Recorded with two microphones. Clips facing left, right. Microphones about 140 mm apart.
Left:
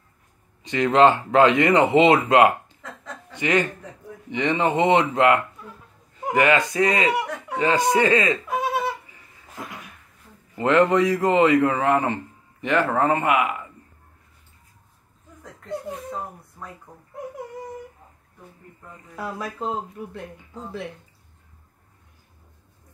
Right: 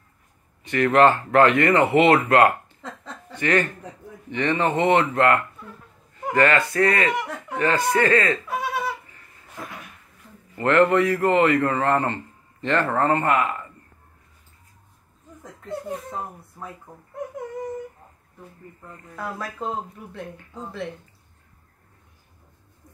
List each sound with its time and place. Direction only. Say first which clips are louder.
0.7 s a man's voice: even; 15° left (ahead or behind)
10.5 s a man's voice: even; 15° left (ahead or behind)
19.1 s speech: left 1 dB; 5° left (ahead or behind)